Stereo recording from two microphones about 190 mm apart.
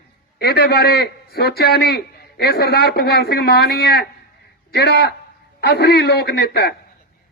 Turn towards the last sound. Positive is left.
turn(degrees=60)  # may be behind; listen again after turning